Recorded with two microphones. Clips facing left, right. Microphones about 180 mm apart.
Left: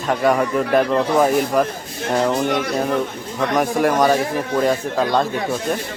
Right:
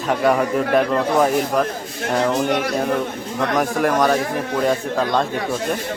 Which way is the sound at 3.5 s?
Centre (ahead or behind).